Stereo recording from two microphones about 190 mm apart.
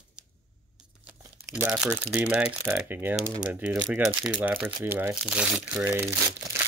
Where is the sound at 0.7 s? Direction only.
5° right (ahead or behind).